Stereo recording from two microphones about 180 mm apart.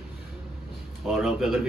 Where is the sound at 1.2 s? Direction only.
Centre (ahead or behind).